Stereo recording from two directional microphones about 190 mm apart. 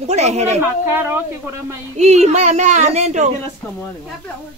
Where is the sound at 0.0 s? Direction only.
35° right (ahead or behind).